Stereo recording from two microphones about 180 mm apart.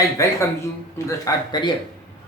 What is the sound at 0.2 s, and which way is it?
A man's voice, 15° left (ahead or behind).